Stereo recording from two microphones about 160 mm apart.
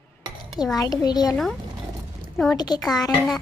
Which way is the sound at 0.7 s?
25° left (ahead or behind).